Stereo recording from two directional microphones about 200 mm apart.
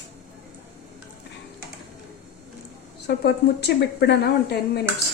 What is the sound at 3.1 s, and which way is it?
A woman's voice, 55° left (ahead or behind).